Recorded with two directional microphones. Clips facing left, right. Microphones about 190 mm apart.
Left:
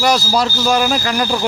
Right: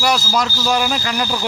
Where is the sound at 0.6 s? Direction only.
50° left (ahead or behind).